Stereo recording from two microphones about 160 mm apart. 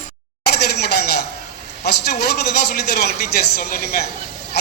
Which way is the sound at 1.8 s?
90° left.